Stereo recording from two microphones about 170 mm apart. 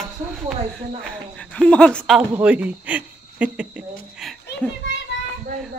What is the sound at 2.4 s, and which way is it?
Speech, 5° right (ahead or behind).